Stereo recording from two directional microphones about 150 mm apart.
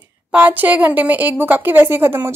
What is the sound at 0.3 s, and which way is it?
Speech, 10° right (ahead or behind).